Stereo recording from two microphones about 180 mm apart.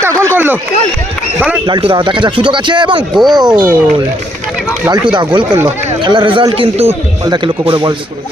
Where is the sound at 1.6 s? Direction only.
30° right (ahead or behind).